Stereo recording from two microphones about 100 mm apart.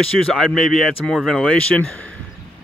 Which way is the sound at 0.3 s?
Centre (ahead or behind).